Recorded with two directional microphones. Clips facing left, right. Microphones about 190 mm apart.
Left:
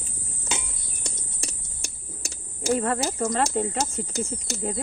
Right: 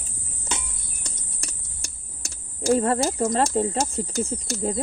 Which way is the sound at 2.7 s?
30° right (ahead or behind).